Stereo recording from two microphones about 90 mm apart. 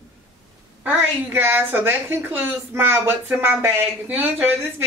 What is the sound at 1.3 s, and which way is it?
A woman's voice, 25° right (ahead or behind).